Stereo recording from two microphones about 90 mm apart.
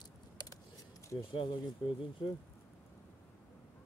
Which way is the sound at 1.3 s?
65° left (ahead or behind).